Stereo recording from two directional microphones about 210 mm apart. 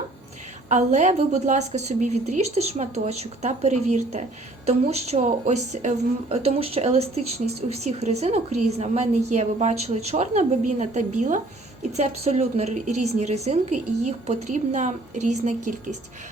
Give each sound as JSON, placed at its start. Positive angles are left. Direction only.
{"t": 0.7, "sound": "a woman's voice", "side_deg": -35}